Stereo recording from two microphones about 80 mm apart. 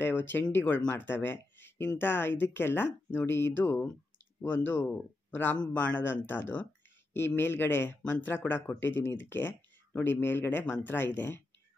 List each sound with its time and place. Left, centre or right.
0.0 s speech: left